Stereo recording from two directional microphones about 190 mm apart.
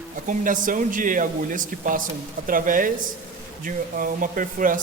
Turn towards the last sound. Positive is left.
turn(degrees=-45)  # may be behind; listen again after turning